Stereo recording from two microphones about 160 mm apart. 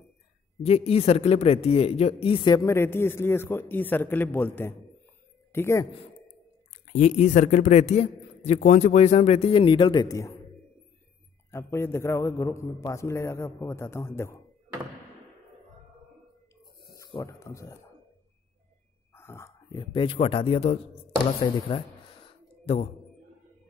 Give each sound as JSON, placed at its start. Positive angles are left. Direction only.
{"t": 0.7, "sound": "speech", "side_deg": 40}
{"t": 2.6, "sound": "a man's voice", "side_deg": 15}
{"t": 6.9, "sound": "a man's voice", "side_deg": 50}
{"t": 11.5, "sound": "a man's voice", "side_deg": 15}
{"t": 17.1, "sound": "speech", "side_deg": 20}
{"t": 19.1, "sound": "chicken", "side_deg": 15}
{"t": 19.8, "sound": "speech", "side_deg": 30}